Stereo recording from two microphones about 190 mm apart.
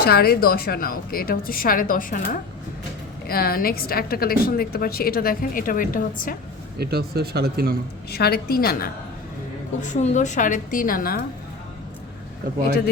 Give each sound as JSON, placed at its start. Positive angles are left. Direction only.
{"t": 0.0, "sound": "a woman's voice", "side_deg": 55}
{"t": 6.7, "sound": "speech", "side_deg": -55}
{"t": 8.1, "sound": "a woman's voice", "side_deg": 55}
{"t": 9.8, "sound": "a woman's voice", "side_deg": 40}